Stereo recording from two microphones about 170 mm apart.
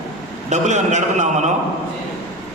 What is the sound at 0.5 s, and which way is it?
Speech, 45° right (ahead or behind).